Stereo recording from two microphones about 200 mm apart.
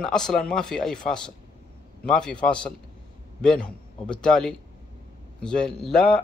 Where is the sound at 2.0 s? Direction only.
5° left (ahead or behind).